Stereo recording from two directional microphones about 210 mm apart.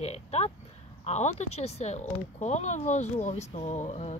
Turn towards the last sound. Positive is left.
turn(degrees=30)  # may be behind; listen again after turning